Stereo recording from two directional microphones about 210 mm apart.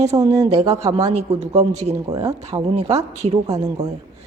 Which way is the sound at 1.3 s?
30° right (ahead or behind).